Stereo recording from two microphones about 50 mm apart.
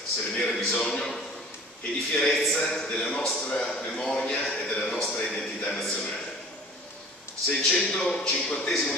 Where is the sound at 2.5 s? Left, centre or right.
Centre.